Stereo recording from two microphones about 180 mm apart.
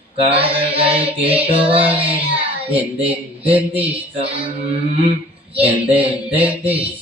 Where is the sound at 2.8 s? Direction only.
30° right (ahead or behind).